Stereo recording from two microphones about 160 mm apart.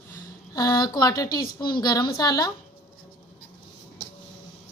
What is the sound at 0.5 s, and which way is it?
A woman's voice, 25° left (ahead or behind).